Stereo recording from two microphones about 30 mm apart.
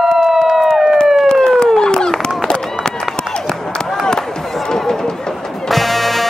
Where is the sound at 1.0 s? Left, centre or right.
Centre.